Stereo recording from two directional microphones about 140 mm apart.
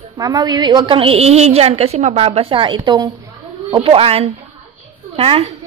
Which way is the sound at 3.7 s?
40° right (ahead or behind).